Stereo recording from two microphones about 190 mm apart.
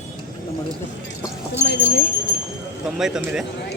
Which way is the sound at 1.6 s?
55° left (ahead or behind).